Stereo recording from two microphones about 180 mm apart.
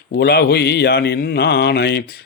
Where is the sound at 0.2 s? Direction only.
65° left (ahead or behind).